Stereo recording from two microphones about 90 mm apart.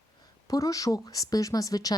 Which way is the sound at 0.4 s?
40° left (ahead or behind).